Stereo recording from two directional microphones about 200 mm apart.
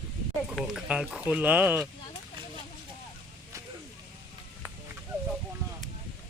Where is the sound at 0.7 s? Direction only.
5° right (ahead or behind).